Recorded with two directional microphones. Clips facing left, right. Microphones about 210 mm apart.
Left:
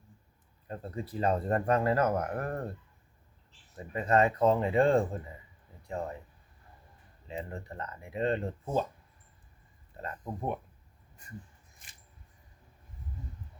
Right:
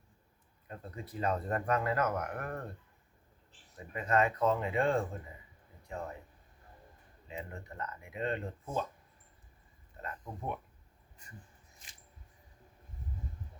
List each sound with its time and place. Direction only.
0.7 s speech: 30° left (ahead or behind)
3.9 s speech: 30° left (ahead or behind)
7.3 s speech: 35° left (ahead or behind)
10.0 s speech: 35° left (ahead or behind)